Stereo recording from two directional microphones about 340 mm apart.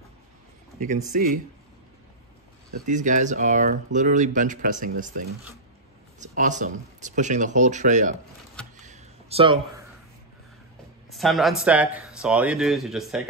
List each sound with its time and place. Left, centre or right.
1.1 s speech: right
2.8 s speech: right
8.8 s a sound: centre
11.1 s speech: centre